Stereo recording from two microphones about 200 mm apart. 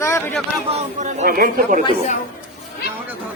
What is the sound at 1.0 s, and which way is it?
Speech, 40° right (ahead or behind).